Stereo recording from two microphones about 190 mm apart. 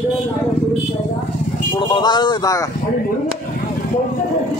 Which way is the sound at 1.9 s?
25° left (ahead or behind).